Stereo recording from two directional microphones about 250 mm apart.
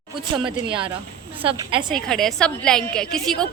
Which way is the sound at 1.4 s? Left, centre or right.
Right.